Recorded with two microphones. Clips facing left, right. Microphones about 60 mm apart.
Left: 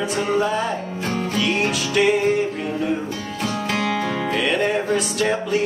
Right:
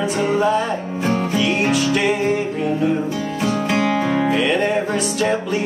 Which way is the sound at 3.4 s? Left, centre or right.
Centre.